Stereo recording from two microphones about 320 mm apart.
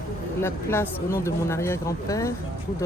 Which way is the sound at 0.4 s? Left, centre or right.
Centre.